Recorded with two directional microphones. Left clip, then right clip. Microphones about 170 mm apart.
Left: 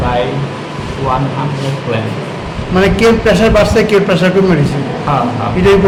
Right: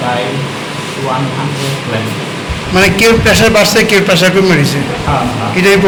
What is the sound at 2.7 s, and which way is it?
A man's voice, 5° right (ahead or behind).